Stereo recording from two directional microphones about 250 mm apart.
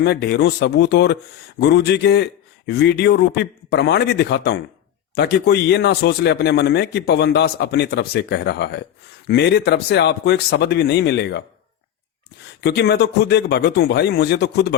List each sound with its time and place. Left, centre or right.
0.0 s speech: left
12.6 s speech: left